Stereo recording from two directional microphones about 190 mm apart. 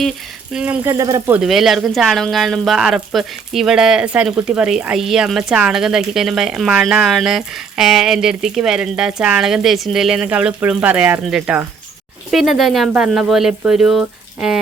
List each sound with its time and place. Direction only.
0.5 s speech: 10° right (ahead or behind)
1.4 s speech: centre (ahead or behind)